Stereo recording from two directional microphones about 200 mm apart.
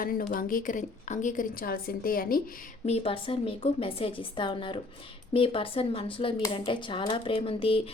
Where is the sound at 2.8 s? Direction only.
30° left (ahead or behind).